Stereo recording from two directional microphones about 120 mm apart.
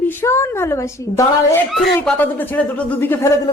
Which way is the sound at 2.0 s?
15° left (ahead or behind).